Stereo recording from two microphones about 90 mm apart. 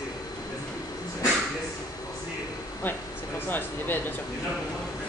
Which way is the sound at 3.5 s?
20° left (ahead or behind).